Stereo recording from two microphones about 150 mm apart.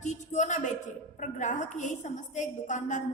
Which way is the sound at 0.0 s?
50° left (ahead or behind).